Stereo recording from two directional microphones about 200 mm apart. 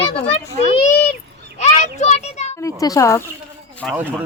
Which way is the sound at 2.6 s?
15° left (ahead or behind).